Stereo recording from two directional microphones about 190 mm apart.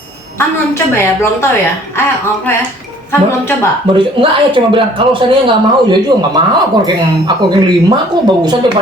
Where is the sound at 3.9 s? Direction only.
25° right (ahead or behind).